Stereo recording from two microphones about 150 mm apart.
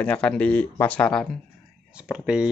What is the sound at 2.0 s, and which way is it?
Speech, 5° right (ahead or behind).